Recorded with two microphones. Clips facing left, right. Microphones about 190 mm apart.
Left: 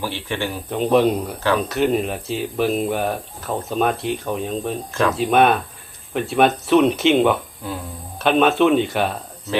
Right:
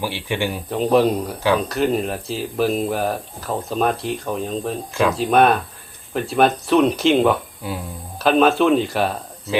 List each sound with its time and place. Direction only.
0.0 s speech: 15° right (ahead or behind)
0.7 s speech: centre (ahead or behind)
4.9 s speech: 10° right (ahead or behind)
5.1 s speech: centre (ahead or behind)